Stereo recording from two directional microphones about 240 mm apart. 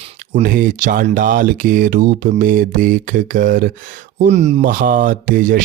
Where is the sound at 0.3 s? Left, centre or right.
Right.